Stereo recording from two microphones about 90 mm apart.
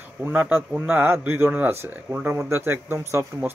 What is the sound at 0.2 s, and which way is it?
Speech, 20° right (ahead or behind).